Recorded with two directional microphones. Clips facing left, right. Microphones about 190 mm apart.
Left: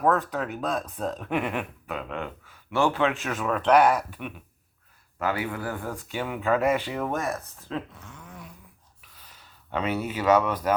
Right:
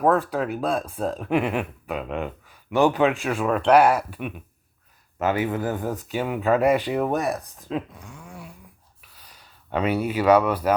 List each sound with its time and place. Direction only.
0.0 s speech: 15° right (ahead or behind)
1.9 s speech: 15° right (ahead or behind)
5.2 s speech: 20° right (ahead or behind)